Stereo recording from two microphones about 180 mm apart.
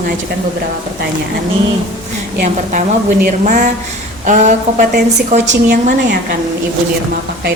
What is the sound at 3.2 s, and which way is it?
A woman's voice, 40° right (ahead or behind).